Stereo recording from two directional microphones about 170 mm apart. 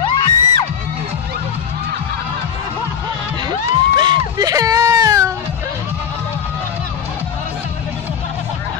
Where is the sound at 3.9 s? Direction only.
25° right (ahead or behind).